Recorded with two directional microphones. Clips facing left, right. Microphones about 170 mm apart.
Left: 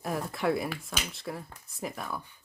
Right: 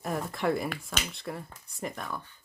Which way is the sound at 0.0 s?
Centre (ahead or behind).